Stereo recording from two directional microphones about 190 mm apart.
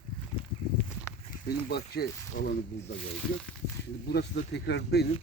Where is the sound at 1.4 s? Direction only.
55° left (ahead or behind).